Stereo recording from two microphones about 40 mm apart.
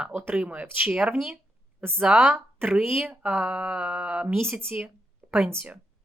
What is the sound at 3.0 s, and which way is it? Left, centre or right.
Speech, right.